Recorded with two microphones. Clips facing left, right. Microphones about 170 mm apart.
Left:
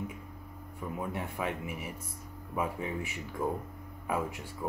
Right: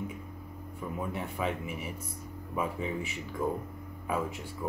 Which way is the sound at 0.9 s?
5° left (ahead or behind).